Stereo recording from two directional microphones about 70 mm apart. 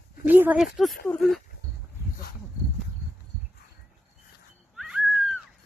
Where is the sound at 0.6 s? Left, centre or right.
Centre.